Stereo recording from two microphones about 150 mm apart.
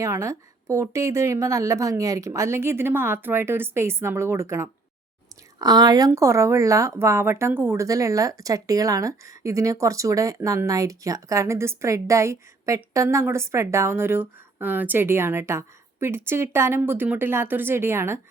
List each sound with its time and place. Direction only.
0.0 s a woman's voice: 20° right (ahead or behind)